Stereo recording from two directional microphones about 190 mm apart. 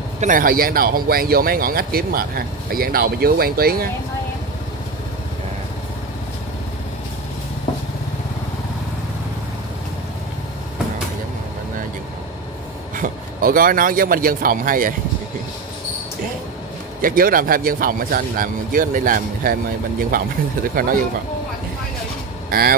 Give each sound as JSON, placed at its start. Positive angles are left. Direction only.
{"t": 0.2, "sound": "speech", "side_deg": -45}
{"t": 12.9, "sound": "speech", "side_deg": -45}
{"t": 17.0, "sound": "speech", "side_deg": -50}
{"t": 22.5, "sound": "speech", "side_deg": -50}